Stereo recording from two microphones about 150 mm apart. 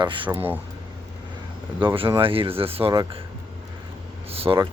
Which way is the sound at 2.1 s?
35° right (ahead or behind).